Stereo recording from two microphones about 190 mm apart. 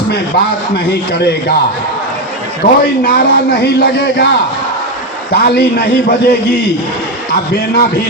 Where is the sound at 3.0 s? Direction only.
55° left (ahead or behind).